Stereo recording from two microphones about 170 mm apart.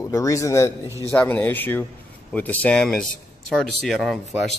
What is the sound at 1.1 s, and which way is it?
Speech, 10° left (ahead or behind).